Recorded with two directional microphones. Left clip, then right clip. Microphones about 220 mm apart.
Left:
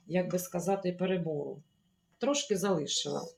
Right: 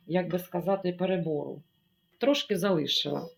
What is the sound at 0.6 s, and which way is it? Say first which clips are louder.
Speech: right 4 dB; 20° right (ahead or behind).